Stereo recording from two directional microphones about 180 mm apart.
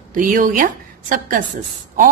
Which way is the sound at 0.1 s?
50° right (ahead or behind).